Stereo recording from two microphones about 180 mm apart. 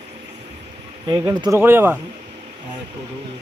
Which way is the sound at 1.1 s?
20° right (ahead or behind).